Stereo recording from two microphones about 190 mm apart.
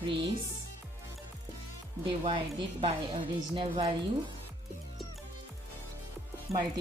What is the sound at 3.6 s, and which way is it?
Speech, 25° right (ahead or behind).